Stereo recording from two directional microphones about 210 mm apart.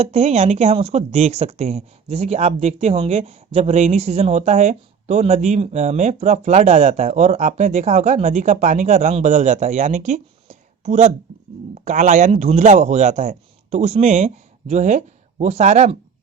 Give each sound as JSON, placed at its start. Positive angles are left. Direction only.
{"t": 0.0, "sound": "speech", "side_deg": -30}